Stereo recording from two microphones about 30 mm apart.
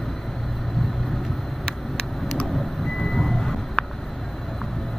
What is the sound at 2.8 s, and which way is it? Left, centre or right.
Vehicle, centre.